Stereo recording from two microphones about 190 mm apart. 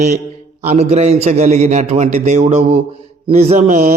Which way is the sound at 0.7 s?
35° right (ahead or behind).